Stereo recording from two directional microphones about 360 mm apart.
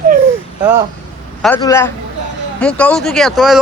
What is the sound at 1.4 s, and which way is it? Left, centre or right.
A man's voice, centre.